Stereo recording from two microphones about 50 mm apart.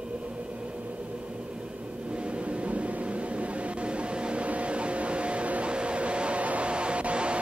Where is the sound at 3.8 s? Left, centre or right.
Right.